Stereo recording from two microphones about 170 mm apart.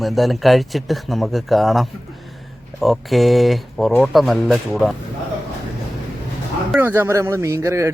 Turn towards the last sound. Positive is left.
turn(degrees=-15)  # may be behind; listen again after turning